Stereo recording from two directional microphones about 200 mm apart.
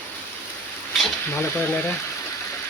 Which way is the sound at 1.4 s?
10° left (ahead or behind).